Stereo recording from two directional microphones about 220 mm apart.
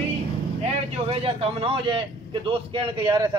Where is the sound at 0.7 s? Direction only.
25° right (ahead or behind).